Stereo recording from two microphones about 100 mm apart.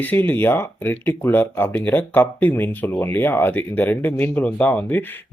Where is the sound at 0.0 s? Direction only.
20° left (ahead or behind).